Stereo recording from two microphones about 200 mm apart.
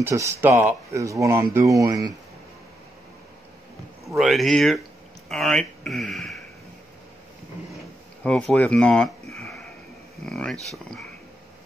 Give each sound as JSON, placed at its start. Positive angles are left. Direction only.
{"t": 0.0, "sound": "speech", "side_deg": -15}
{"t": 4.2, "sound": "speech", "side_deg": 0}
{"t": 8.2, "sound": "speech", "side_deg": 5}